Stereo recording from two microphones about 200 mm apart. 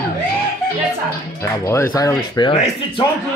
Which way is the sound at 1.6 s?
15° left (ahead or behind).